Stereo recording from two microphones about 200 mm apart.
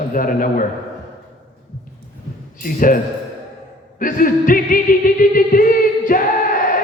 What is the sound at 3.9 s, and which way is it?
Music, 45° left (ahead or behind).